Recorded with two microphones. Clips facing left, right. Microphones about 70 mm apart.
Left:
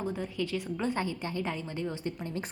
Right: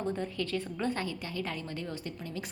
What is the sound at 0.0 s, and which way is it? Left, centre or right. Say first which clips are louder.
A woman's voice: even; centre.